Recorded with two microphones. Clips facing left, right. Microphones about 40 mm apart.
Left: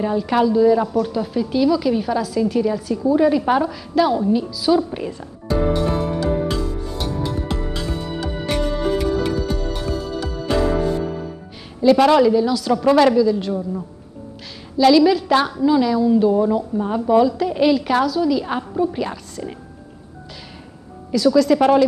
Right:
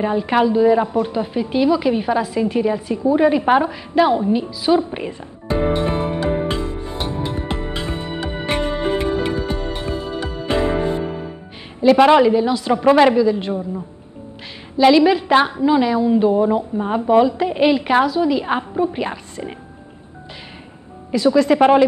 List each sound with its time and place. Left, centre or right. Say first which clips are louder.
0.0 s a sound: right 1 dB; right
11.8 s a woman's voice: right 2 dB; right
14.8 s a woman's voice: right 1 dB; right
21.1 s a woman's voice: even; right